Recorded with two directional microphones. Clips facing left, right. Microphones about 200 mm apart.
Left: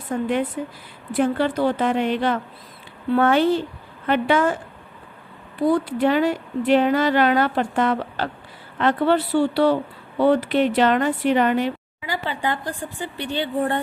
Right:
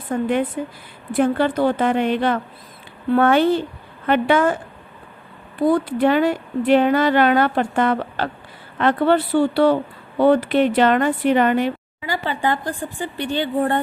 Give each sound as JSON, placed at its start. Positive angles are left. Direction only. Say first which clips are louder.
{"t": 0.1, "sound": "speech", "louder": "right 2 dB", "side_deg": -55}
{"t": 5.7, "sound": "speech", "louder": "right 2 dB", "side_deg": -55}